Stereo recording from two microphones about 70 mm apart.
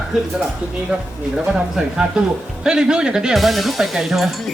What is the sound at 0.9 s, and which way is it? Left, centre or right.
Speech, centre.